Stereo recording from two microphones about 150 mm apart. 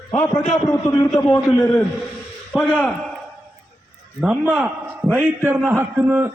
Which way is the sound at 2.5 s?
5° left (ahead or behind).